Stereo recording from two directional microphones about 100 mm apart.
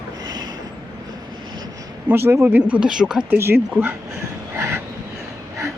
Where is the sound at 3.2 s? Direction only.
20° right (ahead or behind).